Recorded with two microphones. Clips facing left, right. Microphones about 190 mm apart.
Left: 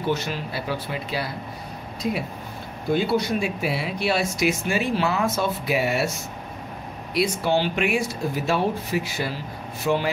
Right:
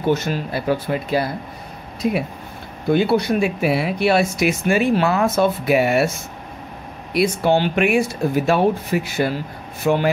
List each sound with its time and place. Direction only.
0.1 s speech: 45° right (ahead or behind)
2.9 s speech: 60° right (ahead or behind)
7.2 s speech: 55° right (ahead or behind)